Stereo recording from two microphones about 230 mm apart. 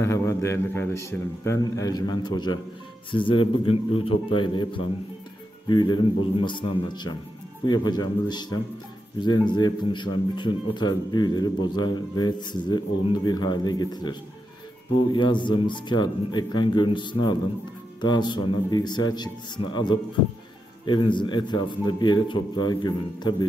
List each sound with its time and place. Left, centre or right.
0.0 s a man's voice: centre
5.7 s a man's voice: centre
15.1 s a man's voice: centre